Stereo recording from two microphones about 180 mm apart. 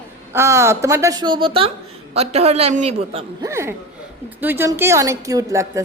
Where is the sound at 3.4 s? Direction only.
15° right (ahead or behind).